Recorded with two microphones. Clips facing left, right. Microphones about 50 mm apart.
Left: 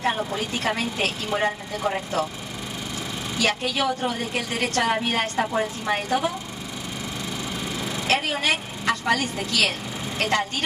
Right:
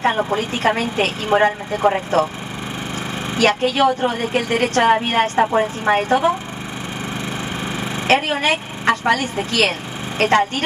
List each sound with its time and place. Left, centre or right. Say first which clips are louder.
0.0 s a woman's voice: right 7 dB; right
3.3 s a woman's voice: right 8 dB; right
7.6 s a woman's voice: right 7 dB; right